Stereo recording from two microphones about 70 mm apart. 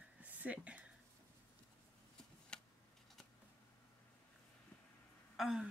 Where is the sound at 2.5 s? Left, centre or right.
Centre.